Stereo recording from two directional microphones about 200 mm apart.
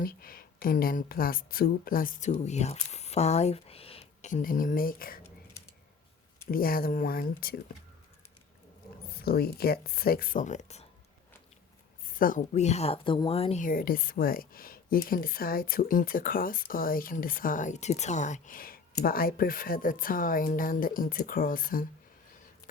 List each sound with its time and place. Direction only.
0.0 s speech: 45° left (ahead or behind)
6.5 s a woman's voice: 45° left (ahead or behind)
9.1 s a woman's voice: 50° left (ahead or behind); by 10.8 s 35° left (ahead or behind)
12.0 s a woman's voice: 45° left (ahead or behind)